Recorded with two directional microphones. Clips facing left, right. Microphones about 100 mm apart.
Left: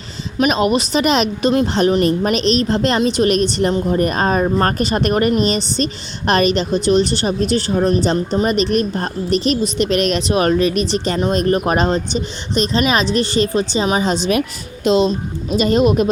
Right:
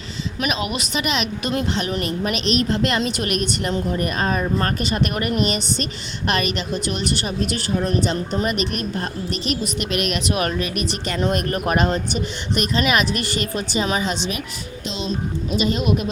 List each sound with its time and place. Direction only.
0.3 s a woman's voice: 35° left (ahead or behind)
14.8 s a woman's voice: 50° left (ahead or behind)